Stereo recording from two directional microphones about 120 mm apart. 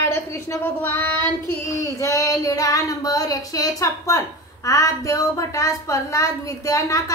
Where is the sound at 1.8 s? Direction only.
25° left (ahead or behind).